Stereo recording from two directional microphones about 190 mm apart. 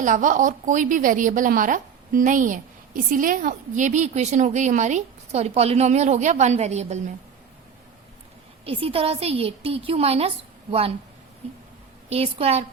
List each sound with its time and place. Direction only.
0.0 s a woman's voice: 40° right (ahead or behind)
8.6 s a woman's voice: 30° right (ahead or behind)
12.0 s a woman's voice: 30° right (ahead or behind)